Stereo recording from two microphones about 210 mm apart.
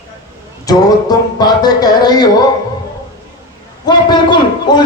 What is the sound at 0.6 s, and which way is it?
Speech, 20° left (ahead or behind).